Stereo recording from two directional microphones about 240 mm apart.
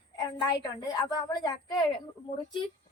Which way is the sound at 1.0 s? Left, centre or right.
Centre.